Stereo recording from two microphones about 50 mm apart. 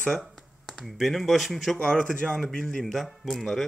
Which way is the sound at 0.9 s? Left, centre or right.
Centre.